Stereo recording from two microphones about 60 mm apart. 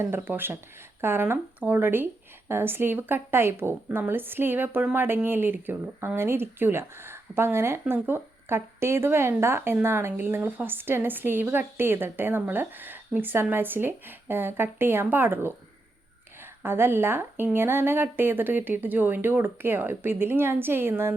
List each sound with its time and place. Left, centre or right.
0.3 s a woman's voice: right
16.6 s a woman's voice: right